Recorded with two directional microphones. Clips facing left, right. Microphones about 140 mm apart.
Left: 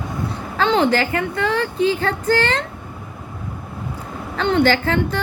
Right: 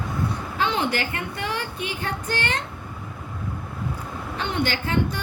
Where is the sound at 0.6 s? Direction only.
90° left.